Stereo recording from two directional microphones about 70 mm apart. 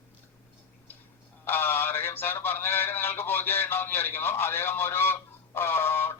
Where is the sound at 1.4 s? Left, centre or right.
Left.